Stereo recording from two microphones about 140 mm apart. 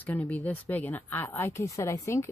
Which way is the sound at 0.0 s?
10° left (ahead or behind).